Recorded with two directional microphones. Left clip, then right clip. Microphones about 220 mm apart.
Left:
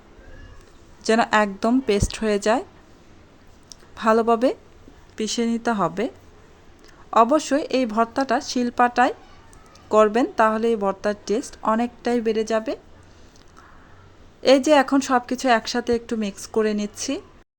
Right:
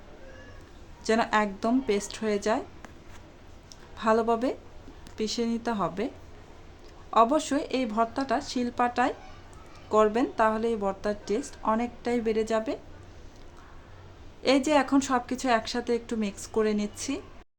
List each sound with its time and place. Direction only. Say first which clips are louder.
1.0 s speech: left 6 dB; 30° left (ahead or behind)
3.7 s speech: left 6 dB; 30° left (ahead or behind)
7.1 s a woman's voice: left 5 dB; 30° left (ahead or behind)
14.4 s a woman's voice: left 8 dB; 25° left (ahead or behind)